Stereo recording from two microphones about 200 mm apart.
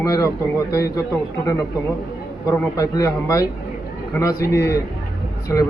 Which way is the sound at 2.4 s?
15° left (ahead or behind).